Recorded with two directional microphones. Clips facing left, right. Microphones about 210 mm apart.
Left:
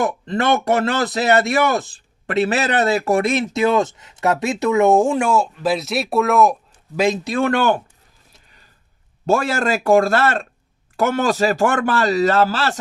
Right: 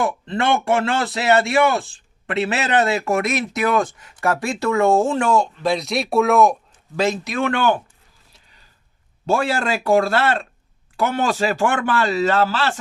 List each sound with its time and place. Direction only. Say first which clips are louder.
0.0 s a man's voice: left 1 dB; 40° left (ahead or behind); by 7.0 s centre (ahead or behind)
7.3 s speech: left 2 dB; 35° left (ahead or behind)
9.2 s speech: left 2 dB; 45° left (ahead or behind)